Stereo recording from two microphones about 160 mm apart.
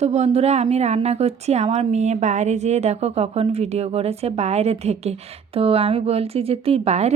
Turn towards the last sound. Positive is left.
turn(degrees=-45)  # may be behind; listen again after turning